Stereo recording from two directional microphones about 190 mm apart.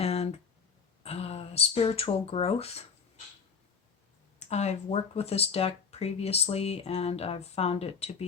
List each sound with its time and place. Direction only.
0.0 s a sound: 35° left (ahead or behind)
1.0 s speech: 30° left (ahead or behind)
4.4 s speech: 35° left (ahead or behind)